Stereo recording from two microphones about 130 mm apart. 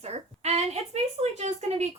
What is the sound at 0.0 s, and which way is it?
A woman's voice, 55° right (ahead or behind).